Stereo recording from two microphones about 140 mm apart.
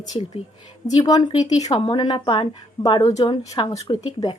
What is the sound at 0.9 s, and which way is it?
Speech, 30° left (ahead or behind).